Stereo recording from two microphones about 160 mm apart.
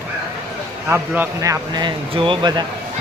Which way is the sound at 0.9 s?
15° right (ahead or behind).